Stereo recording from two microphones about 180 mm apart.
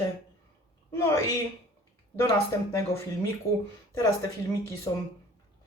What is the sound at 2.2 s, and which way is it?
Speech, 15° left (ahead or behind).